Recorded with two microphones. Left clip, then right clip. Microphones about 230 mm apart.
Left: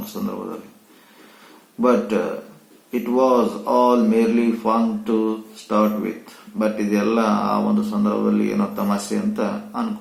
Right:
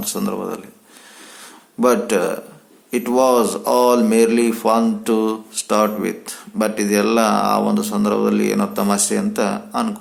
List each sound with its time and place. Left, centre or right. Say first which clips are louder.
0.0 s speech: right 5 dB; right
1.8 s speech: right 3 dB; right